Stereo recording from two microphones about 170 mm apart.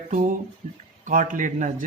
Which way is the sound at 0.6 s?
35° right (ahead or behind).